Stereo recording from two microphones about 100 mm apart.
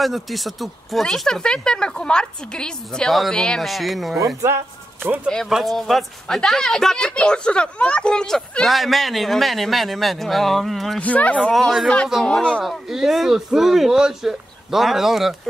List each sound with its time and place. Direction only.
0.0 s speech: centre (ahead or behind)
4.4 s speech: 30° right (ahead or behind)
5.5 s speech: centre (ahead or behind)
11.0 s speech: 15° left (ahead or behind)
11.5 s speech: centre (ahead or behind)